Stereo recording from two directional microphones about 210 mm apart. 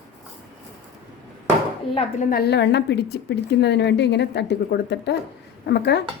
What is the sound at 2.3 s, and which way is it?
A woman's voice, 50° left (ahead or behind).